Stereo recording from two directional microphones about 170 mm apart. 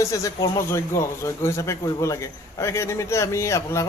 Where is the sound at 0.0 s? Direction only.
20° left (ahead or behind).